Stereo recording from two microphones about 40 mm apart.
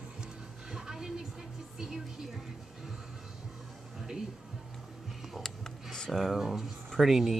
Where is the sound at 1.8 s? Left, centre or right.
Centre.